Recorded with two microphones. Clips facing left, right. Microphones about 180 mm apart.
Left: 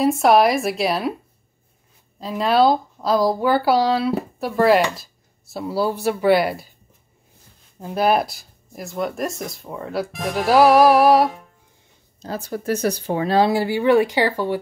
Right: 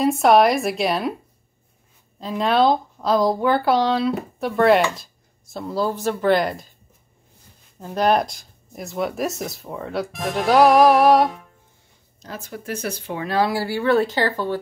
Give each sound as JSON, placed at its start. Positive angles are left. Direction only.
{"t": 0.0, "sound": "speech", "side_deg": 0}
{"t": 2.1, "sound": "speech", "side_deg": 0}
{"t": 7.8, "sound": "speech", "side_deg": 5}
{"t": 12.2, "sound": "speech", "side_deg": 35}